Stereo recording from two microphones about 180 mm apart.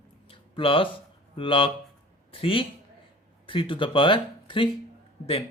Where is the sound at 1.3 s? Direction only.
30° left (ahead or behind).